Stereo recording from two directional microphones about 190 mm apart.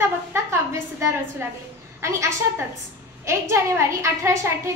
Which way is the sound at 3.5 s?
15° right (ahead or behind).